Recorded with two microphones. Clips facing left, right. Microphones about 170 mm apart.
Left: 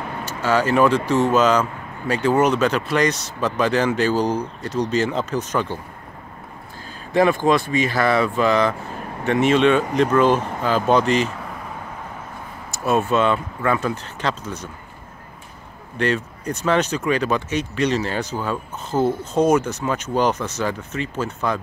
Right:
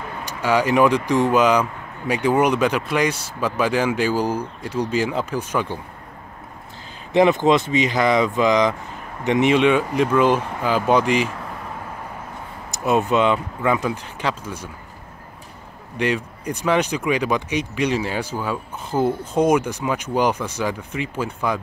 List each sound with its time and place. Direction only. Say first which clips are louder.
0.2 s speech: even; 15° right (ahead or behind)
7.1 s speech: right 1 dB; 20° right (ahead or behind)
12.7 s speech: right 1 dB; 15° right (ahead or behind)
16.0 s speech: left 1 dB; 15° right (ahead or behind)